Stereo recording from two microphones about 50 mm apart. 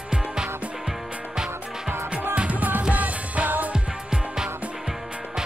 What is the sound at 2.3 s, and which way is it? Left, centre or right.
Music, right.